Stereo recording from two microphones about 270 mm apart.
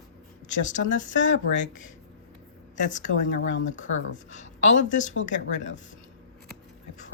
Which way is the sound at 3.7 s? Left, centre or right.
Left.